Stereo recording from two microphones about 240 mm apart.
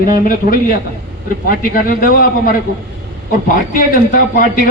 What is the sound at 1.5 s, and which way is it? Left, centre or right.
A man's voice, left.